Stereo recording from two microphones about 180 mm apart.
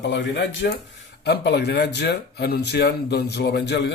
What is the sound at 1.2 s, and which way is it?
Speech, 65° left (ahead or behind).